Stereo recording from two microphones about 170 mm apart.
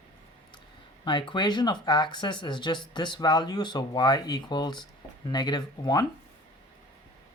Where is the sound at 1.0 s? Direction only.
25° left (ahead or behind).